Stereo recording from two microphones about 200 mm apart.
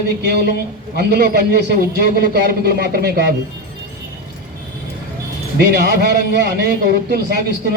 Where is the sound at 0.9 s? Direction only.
55° right (ahead or behind).